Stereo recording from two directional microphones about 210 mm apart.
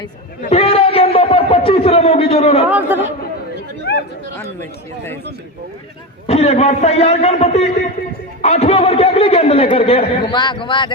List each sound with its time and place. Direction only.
0.5 s a sound: 30° left (ahead or behind)
2.6 s speech: 10° right (ahead or behind)
3.9 s chatter: 50° left (ahead or behind)
6.2 s a man's voice: 30° left (ahead or behind)